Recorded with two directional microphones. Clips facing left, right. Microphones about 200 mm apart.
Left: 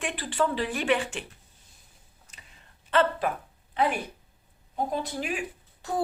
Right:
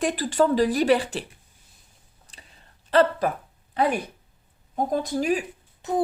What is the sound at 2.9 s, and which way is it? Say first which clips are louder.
A woman's voice: right 4 dB; 35° right (ahead or behind).